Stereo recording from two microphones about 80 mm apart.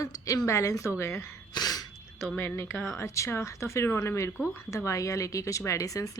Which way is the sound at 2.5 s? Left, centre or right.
Left.